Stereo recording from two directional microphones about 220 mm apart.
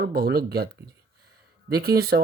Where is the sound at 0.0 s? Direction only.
45° right (ahead or behind).